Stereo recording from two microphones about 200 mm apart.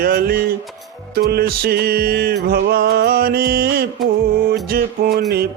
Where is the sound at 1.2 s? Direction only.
50° right (ahead or behind).